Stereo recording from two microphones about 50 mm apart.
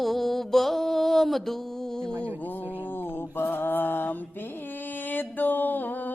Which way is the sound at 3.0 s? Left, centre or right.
Left.